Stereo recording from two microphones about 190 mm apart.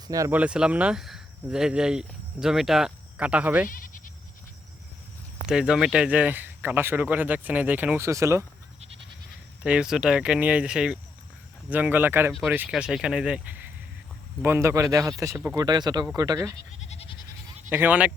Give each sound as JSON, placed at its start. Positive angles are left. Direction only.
{"t": 0.1, "sound": "speech", "side_deg": -15}
{"t": 3.7, "sound": "bleat", "side_deg": 45}
{"t": 5.5, "sound": "speech", "side_deg": -5}
{"t": 9.6, "sound": "speech", "side_deg": -5}
{"t": 16.8, "sound": "goat", "side_deg": 35}
{"t": 17.7, "sound": "speech", "side_deg": -10}